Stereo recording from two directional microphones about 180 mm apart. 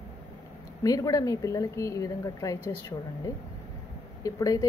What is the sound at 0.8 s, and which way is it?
Speech, 20° left (ahead or behind).